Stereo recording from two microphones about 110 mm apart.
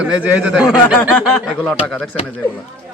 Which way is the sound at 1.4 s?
5° left (ahead or behind).